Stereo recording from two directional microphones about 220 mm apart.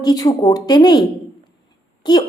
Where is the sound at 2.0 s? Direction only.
20° left (ahead or behind).